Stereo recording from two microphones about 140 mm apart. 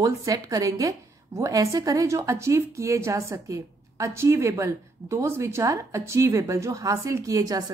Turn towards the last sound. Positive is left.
turn(degrees=-25)  # may be behind; listen again after turning